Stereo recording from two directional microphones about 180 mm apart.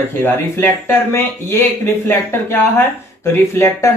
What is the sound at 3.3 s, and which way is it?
Speech, 15° left (ahead or behind).